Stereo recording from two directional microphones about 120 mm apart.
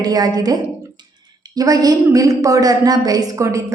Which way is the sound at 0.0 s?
35° right (ahead or behind).